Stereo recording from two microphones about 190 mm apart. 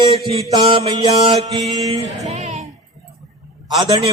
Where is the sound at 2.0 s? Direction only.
35° right (ahead or behind).